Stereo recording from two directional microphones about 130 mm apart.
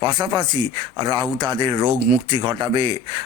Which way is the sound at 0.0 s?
35° right (ahead or behind).